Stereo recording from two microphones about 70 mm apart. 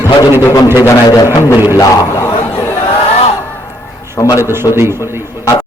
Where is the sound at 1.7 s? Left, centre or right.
Left.